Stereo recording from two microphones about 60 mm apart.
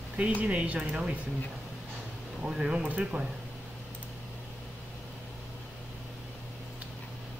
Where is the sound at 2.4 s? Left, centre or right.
Centre.